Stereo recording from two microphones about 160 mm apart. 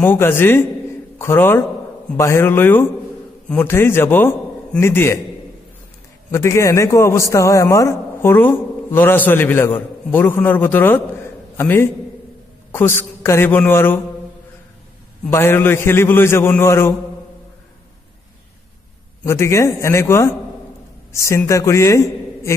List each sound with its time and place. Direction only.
0.0 s a man's voice: 15° left (ahead or behind)
6.3 s a man's voice: 20° left (ahead or behind)
15.2 s a man's voice: 15° left (ahead or behind)
19.2 s a man's voice: 15° left (ahead or behind)